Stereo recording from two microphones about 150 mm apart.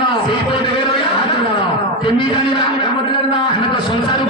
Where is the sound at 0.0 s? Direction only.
35° left (ahead or behind).